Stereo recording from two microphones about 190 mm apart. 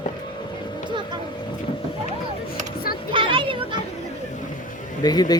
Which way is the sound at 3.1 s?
25° right (ahead or behind).